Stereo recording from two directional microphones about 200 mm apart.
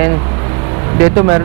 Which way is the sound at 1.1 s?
20° right (ahead or behind).